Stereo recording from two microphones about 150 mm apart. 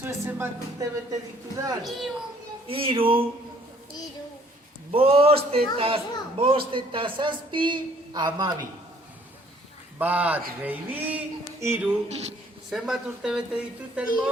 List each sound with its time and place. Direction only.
0.0 s speech: 15° right (ahead or behind)
1.8 s speech: centre (ahead or behind)
2.6 s a man's voice: 40° right (ahead or behind)
4.9 s a man's voice: 40° right (ahead or behind)
10.0 s speech: 10° right (ahead or behind)
12.0 s speech: 45° right (ahead or behind)
12.7 s speech: 5° right (ahead or behind)